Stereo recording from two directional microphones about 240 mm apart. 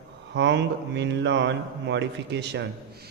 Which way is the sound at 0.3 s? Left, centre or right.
Right.